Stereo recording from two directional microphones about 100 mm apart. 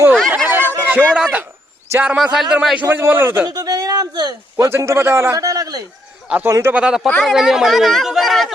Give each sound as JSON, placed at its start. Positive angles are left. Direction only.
{"t": 0.5, "sound": "a sound", "side_deg": -20}
{"t": 1.1, "sound": "speech", "side_deg": -10}
{"t": 2.8, "sound": "a man's voice", "side_deg": -25}
{"t": 3.4, "sound": "speech", "side_deg": -40}
{"t": 4.5, "sound": "a man's voice", "side_deg": -30}
{"t": 6.2, "sound": "a man's voice", "side_deg": -15}
{"t": 6.5, "sound": "a man's voice", "side_deg": -25}
{"t": 6.7, "sound": "speech", "side_deg": -5}